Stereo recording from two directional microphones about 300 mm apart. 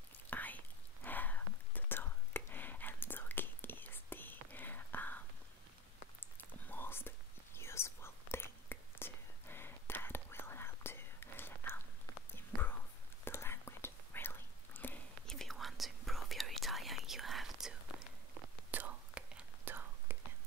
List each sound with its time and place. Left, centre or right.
0.3 s whispering: centre
6.3 s whispering: centre
13.2 s whispering: centre